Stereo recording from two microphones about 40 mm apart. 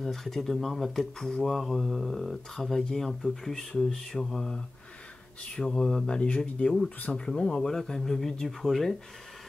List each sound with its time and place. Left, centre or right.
0.0 s speech: centre